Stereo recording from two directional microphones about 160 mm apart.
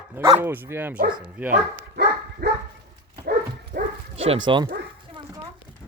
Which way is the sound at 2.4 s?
90° right.